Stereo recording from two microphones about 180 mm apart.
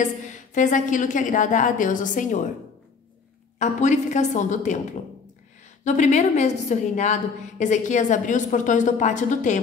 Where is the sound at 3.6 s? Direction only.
40° left (ahead or behind).